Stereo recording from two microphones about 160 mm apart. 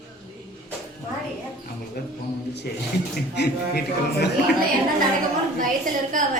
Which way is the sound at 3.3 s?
90° left.